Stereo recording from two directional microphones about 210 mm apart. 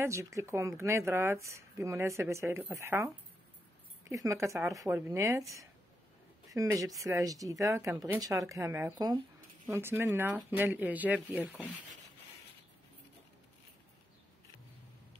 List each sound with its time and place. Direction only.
0.0 s speech: 15° right (ahead or behind)
4.1 s speech: 15° right (ahead or behind)
6.5 s speech: 15° right (ahead or behind)